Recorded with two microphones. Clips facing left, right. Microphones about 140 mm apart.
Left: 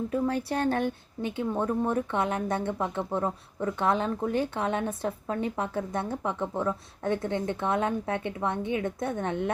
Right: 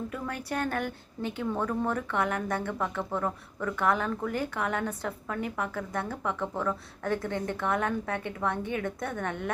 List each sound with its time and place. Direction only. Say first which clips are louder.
0.1 s speech: left 6 dB; 25° left (ahead or behind)